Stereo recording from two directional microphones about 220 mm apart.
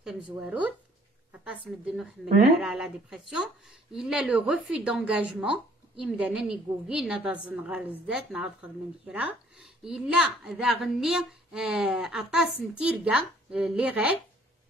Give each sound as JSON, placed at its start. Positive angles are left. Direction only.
{"t": 0.0, "sound": "speech", "side_deg": -5}
{"t": 2.6, "sound": "a woman's voice", "side_deg": -5}